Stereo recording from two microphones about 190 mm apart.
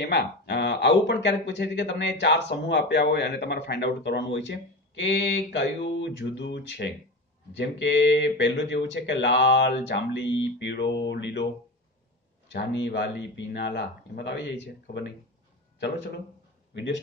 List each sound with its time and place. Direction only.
0.0 s speech: 60° left (ahead or behind)
12.4 s speech: 65° left (ahead or behind)
16.7 s a man's voice: 70° left (ahead or behind)